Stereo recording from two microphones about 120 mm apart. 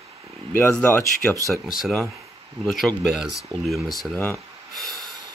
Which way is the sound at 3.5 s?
40° right (ahead or behind).